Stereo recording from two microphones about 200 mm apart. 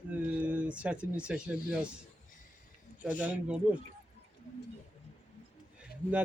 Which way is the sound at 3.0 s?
5° right (ahead or behind).